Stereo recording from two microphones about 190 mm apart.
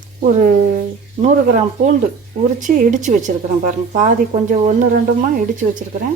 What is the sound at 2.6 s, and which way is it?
A woman's voice, 45° right (ahead or behind).